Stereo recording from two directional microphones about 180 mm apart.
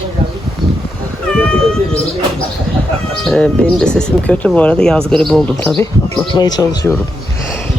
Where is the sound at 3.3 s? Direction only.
5° left (ahead or behind); by 6.8 s 20° left (ahead or behind).